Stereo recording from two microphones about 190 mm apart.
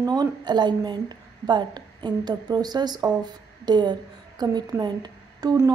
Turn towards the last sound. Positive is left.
turn(degrees=-20)  # may be behind; listen again after turning